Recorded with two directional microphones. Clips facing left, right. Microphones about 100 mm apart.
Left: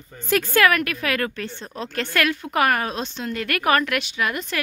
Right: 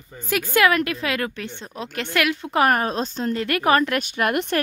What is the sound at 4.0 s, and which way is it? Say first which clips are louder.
Speech: right 4 dB; 50° right (ahead or behind).